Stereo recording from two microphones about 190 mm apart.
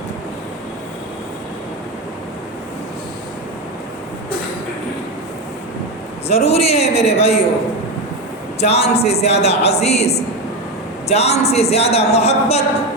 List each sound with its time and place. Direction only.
6.2 s a man's voice: 35° left (ahead or behind)
8.6 s a man's voice: 35° left (ahead or behind)